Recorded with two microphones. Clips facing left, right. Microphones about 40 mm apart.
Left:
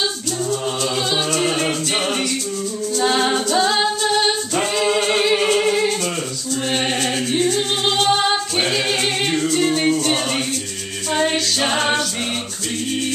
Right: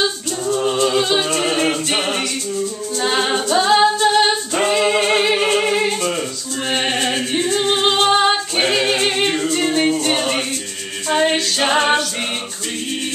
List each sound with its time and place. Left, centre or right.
0.5 s music: centre
3.0 s a capella: centre
9.4 s music: centre